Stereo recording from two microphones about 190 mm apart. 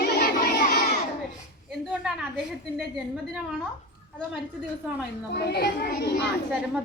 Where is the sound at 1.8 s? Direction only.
Centre (ahead or behind).